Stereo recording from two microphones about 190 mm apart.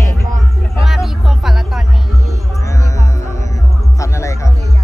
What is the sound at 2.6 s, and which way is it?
Music, 15° left (ahead or behind).